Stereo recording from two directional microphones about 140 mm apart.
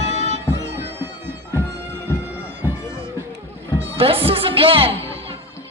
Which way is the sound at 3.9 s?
40° right (ahead or behind).